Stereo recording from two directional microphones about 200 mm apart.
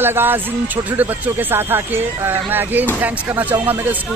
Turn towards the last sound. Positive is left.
turn(degrees=-10)  # may be behind; listen again after turning